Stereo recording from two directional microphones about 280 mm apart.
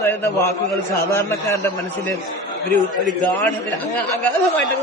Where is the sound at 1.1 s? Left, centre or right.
Centre.